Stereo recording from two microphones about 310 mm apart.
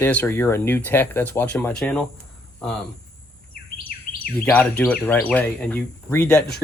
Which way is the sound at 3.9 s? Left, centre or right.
Left.